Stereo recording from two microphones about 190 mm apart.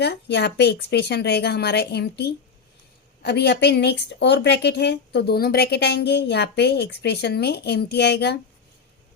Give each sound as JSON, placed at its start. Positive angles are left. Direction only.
{"t": 0.0, "sound": "speech", "side_deg": 60}